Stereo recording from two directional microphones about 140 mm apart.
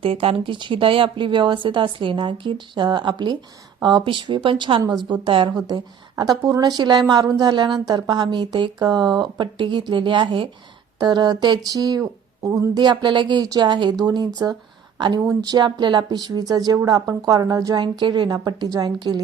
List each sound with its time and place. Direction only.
0.0 s a woman's voice: 40° right (ahead or behind)